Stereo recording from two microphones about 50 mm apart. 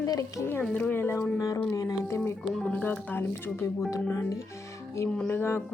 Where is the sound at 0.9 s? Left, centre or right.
Left.